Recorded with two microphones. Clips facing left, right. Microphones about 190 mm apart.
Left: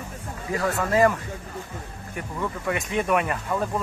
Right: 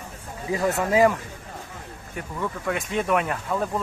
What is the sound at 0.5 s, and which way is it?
Speech, 20° right (ahead or behind).